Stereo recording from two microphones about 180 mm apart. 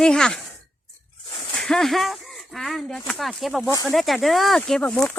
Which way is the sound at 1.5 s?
5° left (ahead or behind).